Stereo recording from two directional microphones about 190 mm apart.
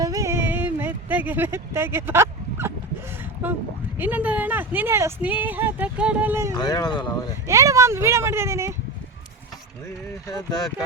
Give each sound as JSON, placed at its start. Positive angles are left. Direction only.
{"t": 0.0, "sound": "a sound", "side_deg": -15}
{"t": 3.9, "sound": "speech", "side_deg": -10}
{"t": 6.6, "sound": "speech", "side_deg": 20}
{"t": 7.4, "sound": "speech", "side_deg": -15}